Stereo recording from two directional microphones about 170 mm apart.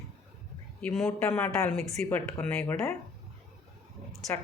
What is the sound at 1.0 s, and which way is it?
Speech, 15° left (ahead or behind).